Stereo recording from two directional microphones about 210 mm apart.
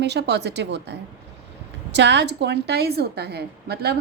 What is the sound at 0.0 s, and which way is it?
Speech, 55° right (ahead or behind).